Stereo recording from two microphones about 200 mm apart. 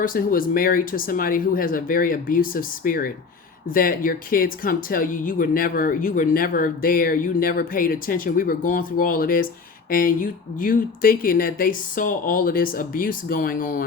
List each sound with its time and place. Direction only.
0.0 s speech: 45° left (ahead or behind)